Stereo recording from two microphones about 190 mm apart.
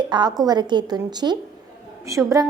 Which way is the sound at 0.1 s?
20° right (ahead or behind).